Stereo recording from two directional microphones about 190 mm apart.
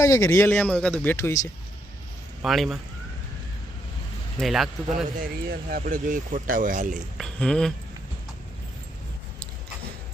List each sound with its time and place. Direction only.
0.0 s speech: 15° left (ahead or behind)
2.4 s speech: centre (ahead or behind)
4.4 s speech: centre (ahead or behind)
5.2 s speech: 50° right (ahead or behind)
7.2 s speech: 5° left (ahead or behind)